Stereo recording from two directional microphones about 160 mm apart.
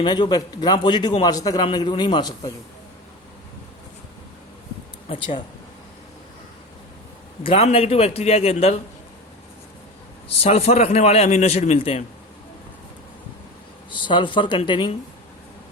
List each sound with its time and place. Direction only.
0.0 s a man's voice: 25° left (ahead or behind)
5.0 s a man's voice: 35° left (ahead or behind)
7.4 s a man's voice: 35° left (ahead or behind)
10.4 s a man's voice: 40° left (ahead or behind)
13.9 s a man's voice: 30° left (ahead or behind)